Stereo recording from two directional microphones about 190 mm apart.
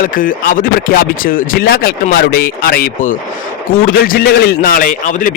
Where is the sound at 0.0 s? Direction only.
45° left (ahead or behind).